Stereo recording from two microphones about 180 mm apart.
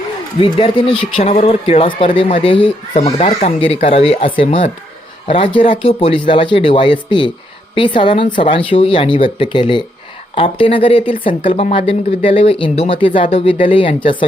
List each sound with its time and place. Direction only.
0.3 s speech: 30° left (ahead or behind)